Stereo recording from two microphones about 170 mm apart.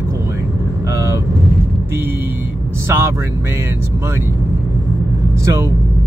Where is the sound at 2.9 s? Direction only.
15° right (ahead or behind).